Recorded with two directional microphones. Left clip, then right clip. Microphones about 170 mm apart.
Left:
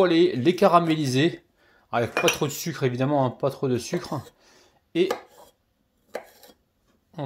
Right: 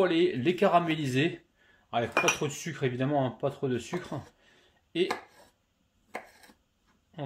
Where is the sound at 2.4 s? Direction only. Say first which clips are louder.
Left 6 dB; 30° left (ahead or behind).